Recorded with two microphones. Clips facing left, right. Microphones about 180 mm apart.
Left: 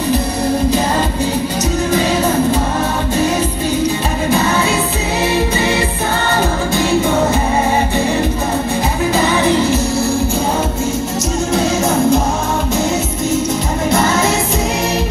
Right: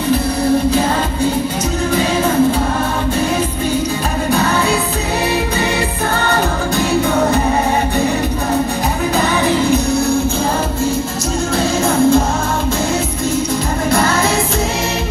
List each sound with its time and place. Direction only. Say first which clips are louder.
9.4 s music: even; centre (ahead or behind)
11.5 s music: even; 20° left (ahead or behind)